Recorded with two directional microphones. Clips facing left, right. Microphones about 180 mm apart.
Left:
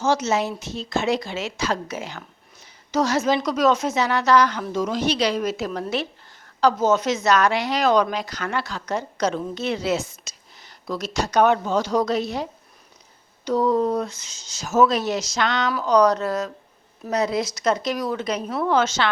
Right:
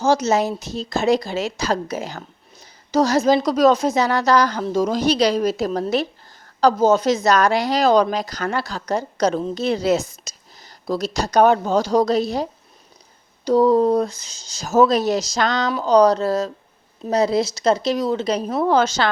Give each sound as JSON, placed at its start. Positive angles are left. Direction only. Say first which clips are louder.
{"t": 0.0, "sound": "a woman's voice", "louder": "right 4 dB", "side_deg": -35}